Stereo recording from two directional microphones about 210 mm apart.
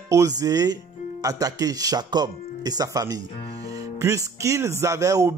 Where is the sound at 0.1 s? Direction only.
15° right (ahead or behind).